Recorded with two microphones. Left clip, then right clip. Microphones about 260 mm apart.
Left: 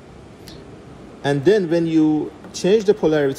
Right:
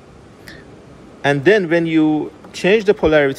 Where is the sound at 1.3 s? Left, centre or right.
Centre.